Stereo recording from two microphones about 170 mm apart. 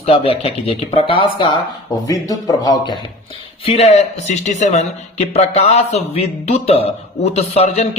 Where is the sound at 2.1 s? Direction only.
20° left (ahead or behind).